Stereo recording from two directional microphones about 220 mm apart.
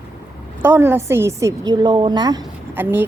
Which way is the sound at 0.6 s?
10° right (ahead or behind).